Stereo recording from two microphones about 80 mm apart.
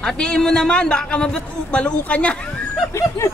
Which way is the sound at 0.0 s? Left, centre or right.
Centre.